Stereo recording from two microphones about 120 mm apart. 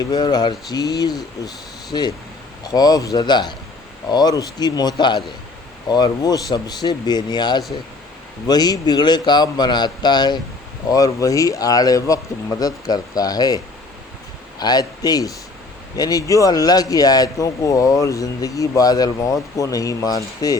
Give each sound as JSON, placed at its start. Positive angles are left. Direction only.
{"t": 0.0, "sound": "speech", "side_deg": 35}
{"t": 14.6, "sound": "speech", "side_deg": 35}